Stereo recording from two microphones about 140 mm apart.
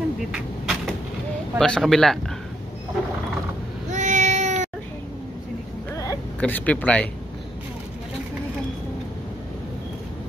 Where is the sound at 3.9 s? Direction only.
60° right (ahead or behind).